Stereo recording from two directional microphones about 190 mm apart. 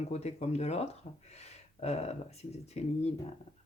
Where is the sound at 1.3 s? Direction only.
35° left (ahead or behind).